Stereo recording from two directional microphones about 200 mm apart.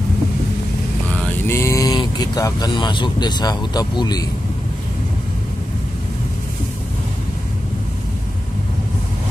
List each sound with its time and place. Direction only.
1.1 s speech: 10° left (ahead or behind)